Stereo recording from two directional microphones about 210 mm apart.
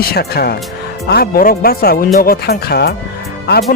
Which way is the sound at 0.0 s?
50° left (ahead or behind).